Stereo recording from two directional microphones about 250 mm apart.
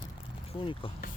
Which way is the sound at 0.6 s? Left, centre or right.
Left.